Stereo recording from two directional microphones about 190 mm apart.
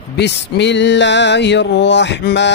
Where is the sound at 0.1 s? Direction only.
65° left (ahead or behind).